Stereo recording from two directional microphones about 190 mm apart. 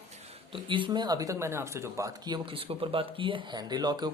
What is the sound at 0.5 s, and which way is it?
Speech, 25° right (ahead or behind).